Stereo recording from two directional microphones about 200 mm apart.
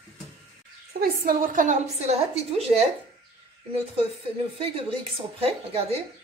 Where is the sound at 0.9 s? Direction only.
45° right (ahead or behind); by 2.9 s 30° right (ahead or behind).